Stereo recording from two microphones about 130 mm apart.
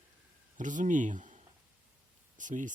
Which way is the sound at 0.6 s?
75° right (ahead or behind).